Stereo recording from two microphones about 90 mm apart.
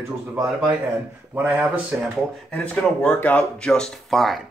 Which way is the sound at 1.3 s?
20° right (ahead or behind).